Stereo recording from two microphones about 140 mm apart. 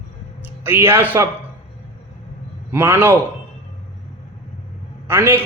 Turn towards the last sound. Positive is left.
turn(degrees=-15)  # may be behind; listen again after turning